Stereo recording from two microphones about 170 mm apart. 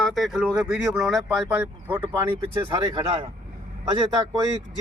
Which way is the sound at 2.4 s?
25° right (ahead or behind).